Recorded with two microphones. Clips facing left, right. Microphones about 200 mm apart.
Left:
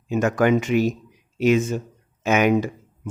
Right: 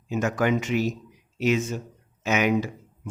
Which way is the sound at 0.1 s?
55° left (ahead or behind).